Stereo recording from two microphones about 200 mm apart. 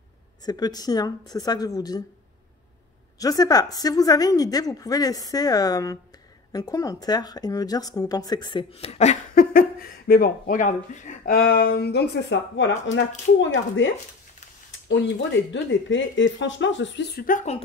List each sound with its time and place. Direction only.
0.5 s a woman's voice: 20° left (ahead or behind)
3.2 s a woman's voice: 20° left (ahead or behind); by 13.8 s 70° left (ahead or behind)
15.5 s speech: 65° left (ahead or behind); by 17.6 s 40° left (ahead or behind)